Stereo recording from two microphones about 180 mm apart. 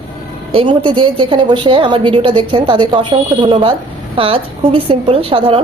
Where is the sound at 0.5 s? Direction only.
30° right (ahead or behind).